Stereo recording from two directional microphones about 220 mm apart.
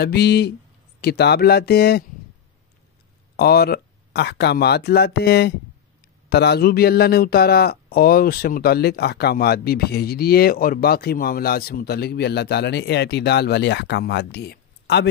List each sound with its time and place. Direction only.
0.0 s a man's voice: 50° left (ahead or behind)
3.3 s a man's voice: 45° left (ahead or behind)